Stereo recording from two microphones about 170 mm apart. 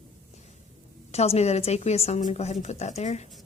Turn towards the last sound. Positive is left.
turn(degrees=40)  # may be behind; listen again after turning